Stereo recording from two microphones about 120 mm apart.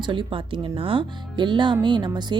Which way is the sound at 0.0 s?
45° right (ahead or behind).